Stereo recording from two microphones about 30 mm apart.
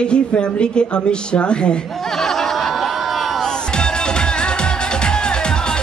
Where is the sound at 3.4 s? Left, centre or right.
Left.